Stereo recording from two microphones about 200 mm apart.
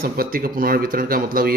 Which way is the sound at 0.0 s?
50° right (ahead or behind).